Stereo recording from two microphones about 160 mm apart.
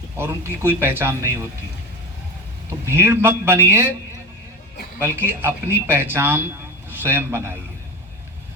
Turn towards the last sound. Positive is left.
turn(degrees=-15)  # may be behind; listen again after turning